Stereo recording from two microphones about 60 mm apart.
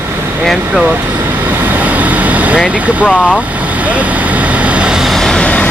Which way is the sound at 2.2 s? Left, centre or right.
Right.